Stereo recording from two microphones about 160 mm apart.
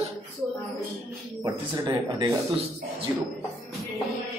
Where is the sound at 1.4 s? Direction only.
25° right (ahead or behind).